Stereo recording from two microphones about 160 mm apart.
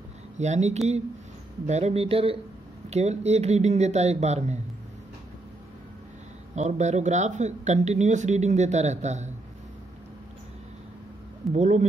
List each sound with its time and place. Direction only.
0.4 s speech: 45° right (ahead or behind)
6.5 s speech: 45° right (ahead or behind)
11.5 s speech: 45° right (ahead or behind)